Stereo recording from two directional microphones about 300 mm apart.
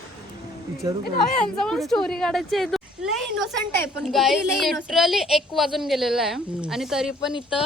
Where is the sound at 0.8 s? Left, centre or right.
Centre.